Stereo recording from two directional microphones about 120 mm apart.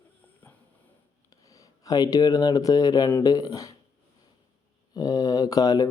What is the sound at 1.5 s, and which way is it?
Speech, 30° left (ahead or behind).